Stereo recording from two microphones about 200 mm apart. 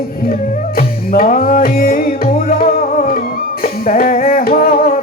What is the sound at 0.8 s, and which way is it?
Music, 45° left (ahead or behind).